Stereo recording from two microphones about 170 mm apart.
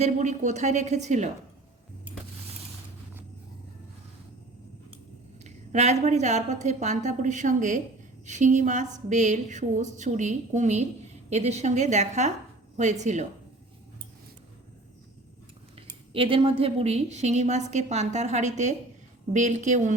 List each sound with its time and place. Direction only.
0.0 s a woman's voice: 45° right (ahead or behind)
5.4 s a woman's voice: 40° right (ahead or behind)
16.1 s a woman's voice: 30° right (ahead or behind); by 20.0 s 45° right (ahead or behind)